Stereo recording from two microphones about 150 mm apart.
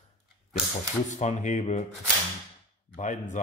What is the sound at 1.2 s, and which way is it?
Speech, 50° left (ahead or behind).